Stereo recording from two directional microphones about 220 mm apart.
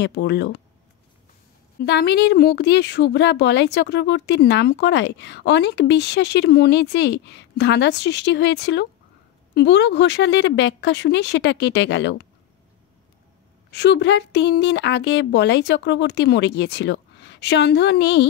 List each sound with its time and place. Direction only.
0.0 s a woman's voice: 50° left (ahead or behind)
1.8 s a woman's voice: 50° left (ahead or behind)
13.7 s a woman's voice: 50° left (ahead or behind)